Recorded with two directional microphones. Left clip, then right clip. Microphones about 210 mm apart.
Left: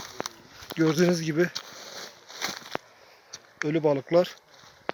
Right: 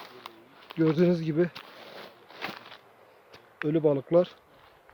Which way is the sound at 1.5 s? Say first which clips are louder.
Left 6 dB; 40° left (ahead or behind).